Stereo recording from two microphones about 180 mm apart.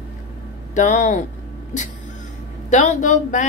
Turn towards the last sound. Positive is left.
turn(degrees=45)  # may be behind; listen again after turning